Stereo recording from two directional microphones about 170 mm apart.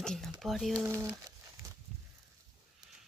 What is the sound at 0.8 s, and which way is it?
Speech, 15° right (ahead or behind).